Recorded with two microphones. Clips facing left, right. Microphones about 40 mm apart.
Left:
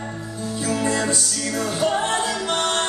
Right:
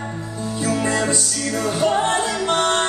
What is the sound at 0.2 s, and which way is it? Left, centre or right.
Music, centre.